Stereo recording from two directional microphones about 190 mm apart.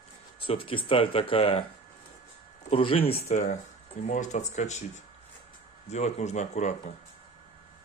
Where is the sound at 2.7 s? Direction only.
30° left (ahead or behind).